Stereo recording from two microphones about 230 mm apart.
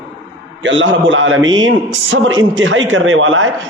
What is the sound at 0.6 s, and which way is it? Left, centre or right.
A man's voice, right.